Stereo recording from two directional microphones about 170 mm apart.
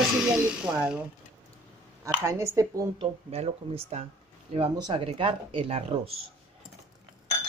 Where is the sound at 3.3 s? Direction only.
35° right (ahead or behind).